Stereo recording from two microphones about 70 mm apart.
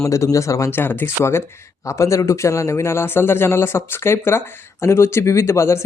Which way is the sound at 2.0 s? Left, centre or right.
Left.